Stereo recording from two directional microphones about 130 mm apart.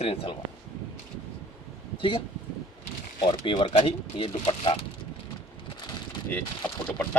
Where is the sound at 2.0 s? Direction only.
40° left (ahead or behind).